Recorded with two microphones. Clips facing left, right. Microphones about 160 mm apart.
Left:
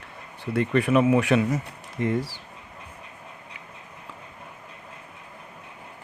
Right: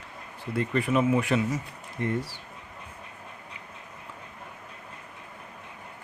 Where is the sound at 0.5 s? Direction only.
70° left (ahead or behind).